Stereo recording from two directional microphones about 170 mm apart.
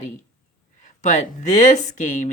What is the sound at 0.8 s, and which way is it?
Speech, 45° left (ahead or behind).